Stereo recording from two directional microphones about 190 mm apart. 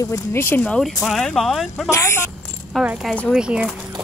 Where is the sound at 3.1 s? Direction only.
5° left (ahead or behind).